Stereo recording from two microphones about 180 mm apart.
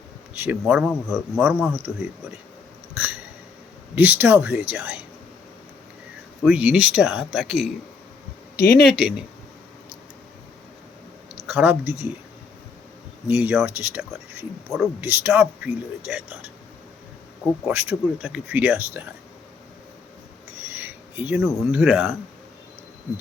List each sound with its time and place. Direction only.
0.3 s speech: 10° right (ahead or behind)
3.0 s hiccup: 10° right (ahead or behind)
3.9 s speech: 10° right (ahead or behind)
6.4 s speech: 5° right (ahead or behind)
8.5 s speech: 60° left (ahead or behind)
8.9 s speech: 5° right (ahead or behind)
11.4 s speech: 5° right (ahead or behind)
13.2 s speech: 10° right (ahead or behind)
14.7 s speech: centre (ahead or behind)
17.7 s speech: 10° right (ahead or behind)
20.7 s speech: 10° right (ahead or behind)